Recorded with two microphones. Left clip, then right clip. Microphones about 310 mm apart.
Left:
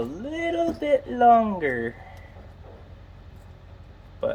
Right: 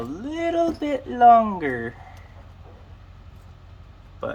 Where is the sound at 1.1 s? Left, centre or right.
Right.